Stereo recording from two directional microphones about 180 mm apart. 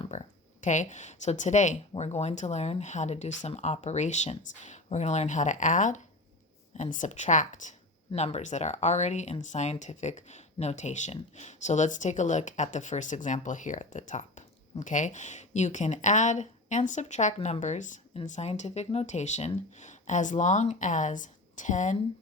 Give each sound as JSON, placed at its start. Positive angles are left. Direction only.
{"t": 0.0, "sound": "speech", "side_deg": 40}